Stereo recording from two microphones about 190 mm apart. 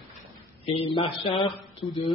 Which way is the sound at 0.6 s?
25° left (ahead or behind).